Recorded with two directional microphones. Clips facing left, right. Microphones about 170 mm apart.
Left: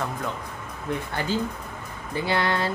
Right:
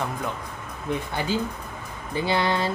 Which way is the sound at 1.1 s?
15° right (ahead or behind).